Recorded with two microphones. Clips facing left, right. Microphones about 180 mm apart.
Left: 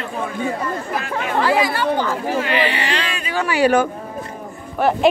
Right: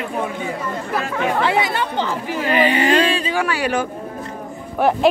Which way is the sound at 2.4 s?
45° right (ahead or behind).